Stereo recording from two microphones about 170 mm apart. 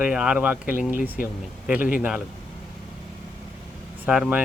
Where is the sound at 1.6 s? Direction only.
10° right (ahead or behind).